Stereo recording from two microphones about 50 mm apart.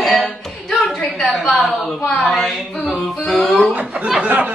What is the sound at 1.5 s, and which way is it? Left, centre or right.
Speech, centre.